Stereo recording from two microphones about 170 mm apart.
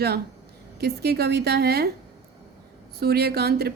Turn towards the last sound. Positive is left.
turn(degrees=-70)  # may be behind; listen again after turning